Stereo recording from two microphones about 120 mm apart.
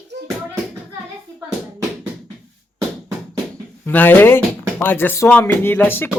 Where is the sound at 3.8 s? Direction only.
15° left (ahead or behind).